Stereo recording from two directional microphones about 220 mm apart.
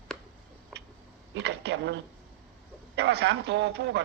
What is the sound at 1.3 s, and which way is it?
A woman's voice, 50° right (ahead or behind).